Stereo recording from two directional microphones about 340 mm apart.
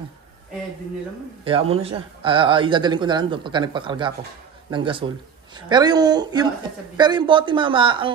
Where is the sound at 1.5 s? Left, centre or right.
Centre.